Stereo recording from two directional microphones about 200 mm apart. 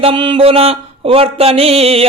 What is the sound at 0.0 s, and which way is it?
A man's voice, 25° right (ahead or behind).